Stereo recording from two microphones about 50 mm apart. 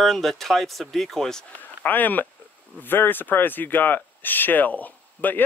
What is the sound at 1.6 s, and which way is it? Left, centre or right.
Speech, left.